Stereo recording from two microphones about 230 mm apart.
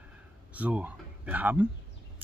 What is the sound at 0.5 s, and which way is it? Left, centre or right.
Speech, centre.